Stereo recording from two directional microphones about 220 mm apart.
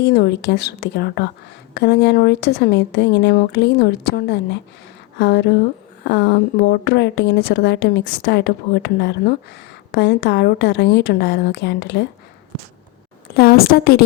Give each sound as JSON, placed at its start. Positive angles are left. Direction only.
{"t": 0.0, "sound": "speech", "side_deg": 45}
{"t": 13.3, "sound": "speech", "side_deg": 45}